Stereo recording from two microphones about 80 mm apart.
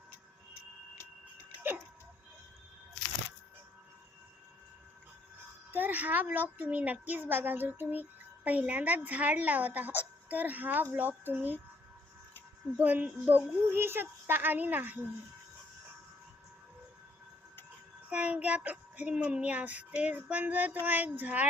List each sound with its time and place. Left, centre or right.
5.7 s a child's voice: right
12.7 s a child's voice: right
18.1 s a child's voice: centre